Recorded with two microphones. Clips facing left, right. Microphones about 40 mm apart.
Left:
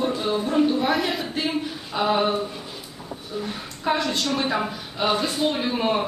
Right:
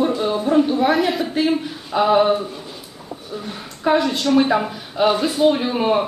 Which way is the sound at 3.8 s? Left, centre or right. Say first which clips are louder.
Right 6 dB; centre.